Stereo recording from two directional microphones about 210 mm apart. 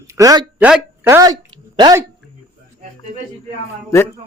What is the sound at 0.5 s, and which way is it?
Speech, 5° right (ahead or behind).